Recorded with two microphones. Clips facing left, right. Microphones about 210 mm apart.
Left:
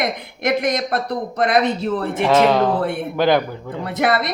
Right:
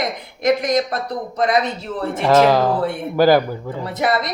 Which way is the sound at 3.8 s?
60° left (ahead or behind).